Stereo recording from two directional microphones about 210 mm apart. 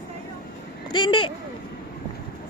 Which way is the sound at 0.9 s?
20° left (ahead or behind).